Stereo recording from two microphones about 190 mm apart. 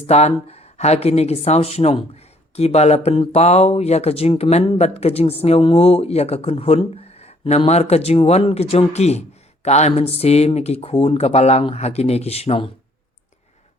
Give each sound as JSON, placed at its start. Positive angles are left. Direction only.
{"t": 0.1, "sound": "speech", "side_deg": 35}